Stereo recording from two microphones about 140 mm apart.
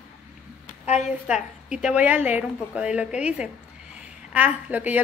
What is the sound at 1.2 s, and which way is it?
A woman's voice, 5° right (ahead or behind).